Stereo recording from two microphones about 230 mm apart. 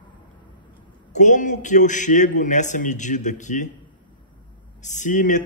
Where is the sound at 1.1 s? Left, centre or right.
Left.